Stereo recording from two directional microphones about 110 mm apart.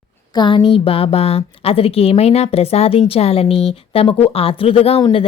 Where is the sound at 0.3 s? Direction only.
50° left (ahead or behind).